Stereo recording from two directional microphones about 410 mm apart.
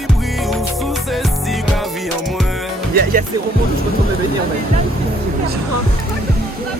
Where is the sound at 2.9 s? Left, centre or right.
Right.